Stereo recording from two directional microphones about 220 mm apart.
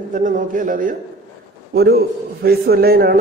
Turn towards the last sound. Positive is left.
turn(degrees=-45)  # may be behind; listen again after turning